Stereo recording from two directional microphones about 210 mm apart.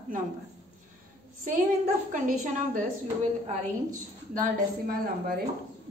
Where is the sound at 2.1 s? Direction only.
40° right (ahead or behind).